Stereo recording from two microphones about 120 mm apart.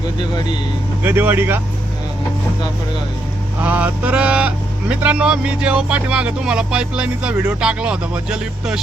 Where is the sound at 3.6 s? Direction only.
15° right (ahead or behind).